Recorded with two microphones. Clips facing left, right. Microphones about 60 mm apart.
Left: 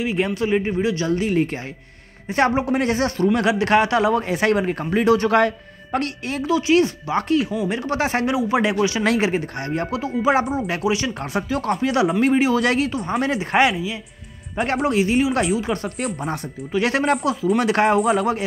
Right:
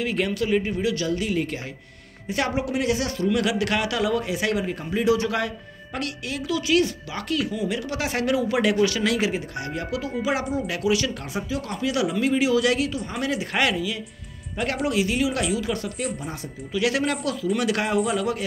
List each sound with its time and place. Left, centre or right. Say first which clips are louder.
0.0 s a man's voice: left 3 dB; left
9.0 s a man's voice: left 4 dB; left
11.3 s a man's voice: left 7 dB; left
17.2 s speech: left 5 dB; left
17.6 s a man's voice: left 7 dB; left